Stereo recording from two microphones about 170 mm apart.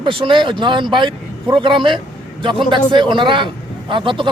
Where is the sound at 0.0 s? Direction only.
30° right (ahead or behind).